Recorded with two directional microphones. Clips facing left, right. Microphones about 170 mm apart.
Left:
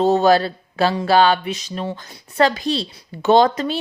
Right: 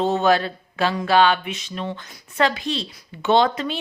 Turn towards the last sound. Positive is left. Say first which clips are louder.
# left 4 dB
turn(degrees=40)  # may be behind; listen again after turning